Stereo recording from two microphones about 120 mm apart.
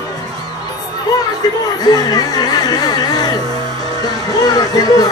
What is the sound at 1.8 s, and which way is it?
Speech, 35° left (ahead or behind).